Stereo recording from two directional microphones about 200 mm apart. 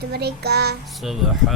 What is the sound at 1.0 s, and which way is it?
Speech, centre (ahead or behind).